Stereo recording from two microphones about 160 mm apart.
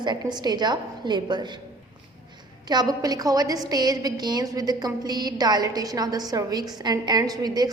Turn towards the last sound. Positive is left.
turn(degrees=-25)  # may be behind; listen again after turning